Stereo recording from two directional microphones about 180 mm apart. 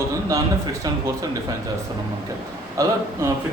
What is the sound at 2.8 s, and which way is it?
Speech, 15° right (ahead or behind).